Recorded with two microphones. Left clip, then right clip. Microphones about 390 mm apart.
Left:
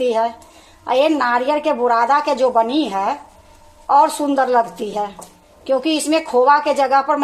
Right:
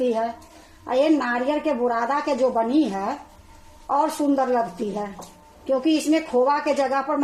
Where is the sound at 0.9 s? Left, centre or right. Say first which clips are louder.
Left 5 dB; left.